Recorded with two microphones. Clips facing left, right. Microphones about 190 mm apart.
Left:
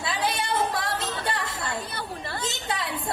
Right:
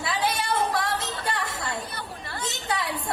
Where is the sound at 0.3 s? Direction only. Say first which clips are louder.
Even; 25° left (ahead or behind).